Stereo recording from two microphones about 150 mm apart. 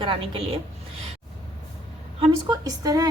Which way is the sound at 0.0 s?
35° right (ahead or behind).